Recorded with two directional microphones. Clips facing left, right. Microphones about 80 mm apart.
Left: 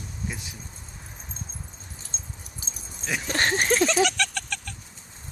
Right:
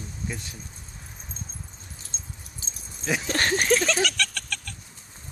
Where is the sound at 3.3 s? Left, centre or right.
Left.